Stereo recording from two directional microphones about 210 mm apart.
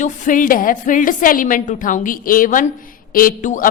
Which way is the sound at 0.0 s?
40° left (ahead or behind).